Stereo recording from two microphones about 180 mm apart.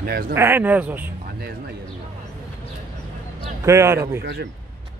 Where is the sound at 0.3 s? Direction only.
15° right (ahead or behind).